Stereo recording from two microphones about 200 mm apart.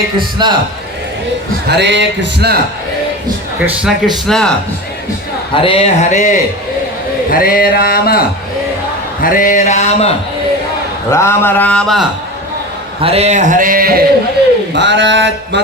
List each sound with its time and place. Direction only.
0.4 s a man's voice: 20° right (ahead or behind)
1.6 s speech: 60° right (ahead or behind)
3.8 s a man's voice: centre (ahead or behind)
5.5 s speech: 30° left (ahead or behind)
7.3 s a sound: 45° left (ahead or behind)
9.2 s speech: 45° left (ahead or behind)
11.1 s speech: 15° left (ahead or behind)
13.0 s speech: 30° right (ahead or behind); by 14.0 s 45° right (ahead or behind)
14.7 s speech: 60° right (ahead or behind)